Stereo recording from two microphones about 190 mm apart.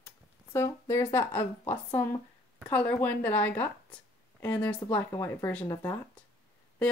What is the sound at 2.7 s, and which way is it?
A woman's voice, 10° left (ahead or behind).